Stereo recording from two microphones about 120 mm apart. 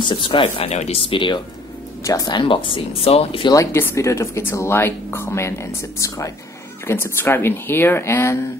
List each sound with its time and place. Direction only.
0.1 s speech: 45° left (ahead or behind)
2.0 s speech: 30° left (ahead or behind)
2.4 s speech: 45° left (ahead or behind)
3.5 s speech: 20° left (ahead or behind)